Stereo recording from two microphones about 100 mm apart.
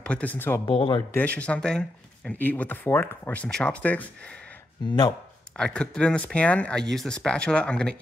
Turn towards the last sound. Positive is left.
turn(degrees=10)  # may be behind; listen again after turning